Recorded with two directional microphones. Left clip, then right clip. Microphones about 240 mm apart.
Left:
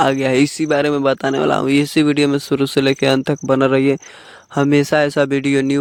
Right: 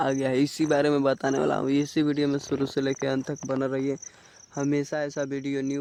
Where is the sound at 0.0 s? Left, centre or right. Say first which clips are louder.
Left 10 dB; left.